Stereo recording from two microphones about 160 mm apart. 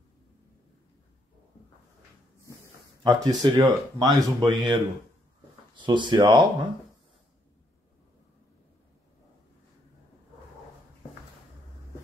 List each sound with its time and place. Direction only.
3.0 s speech: 25° right (ahead or behind)
5.8 s speech: 30° right (ahead or behind)